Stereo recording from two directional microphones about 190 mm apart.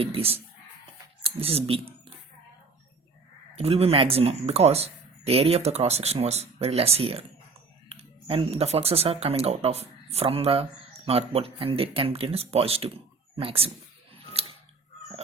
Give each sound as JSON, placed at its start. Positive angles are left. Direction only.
{"t": 0.0, "sound": "speech", "side_deg": -30}
{"t": 3.5, "sound": "speech", "side_deg": -30}